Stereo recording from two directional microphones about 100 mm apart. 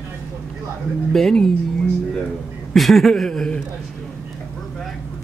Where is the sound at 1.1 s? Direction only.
5° left (ahead or behind).